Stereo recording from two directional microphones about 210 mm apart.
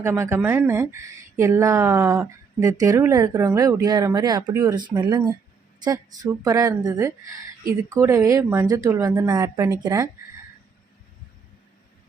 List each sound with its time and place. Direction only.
0.0 s speech: 10° right (ahead or behind)